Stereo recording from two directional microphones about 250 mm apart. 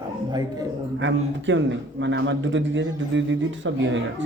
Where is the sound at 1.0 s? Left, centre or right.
Right.